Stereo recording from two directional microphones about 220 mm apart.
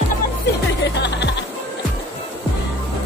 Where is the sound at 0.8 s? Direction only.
50° left (ahead or behind).